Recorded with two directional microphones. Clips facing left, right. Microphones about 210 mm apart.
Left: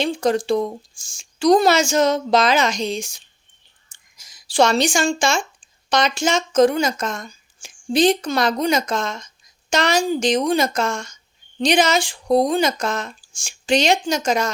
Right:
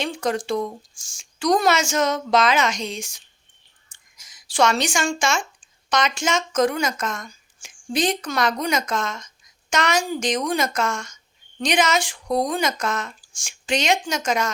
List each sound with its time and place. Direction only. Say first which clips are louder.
0.0 s speech: left 5 dB; 30° left (ahead or behind)